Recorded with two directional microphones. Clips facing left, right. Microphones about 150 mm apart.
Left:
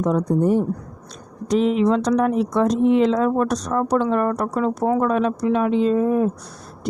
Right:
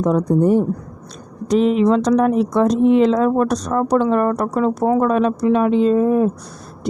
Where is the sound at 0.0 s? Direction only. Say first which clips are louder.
Right 3 dB; 55° right (ahead or behind).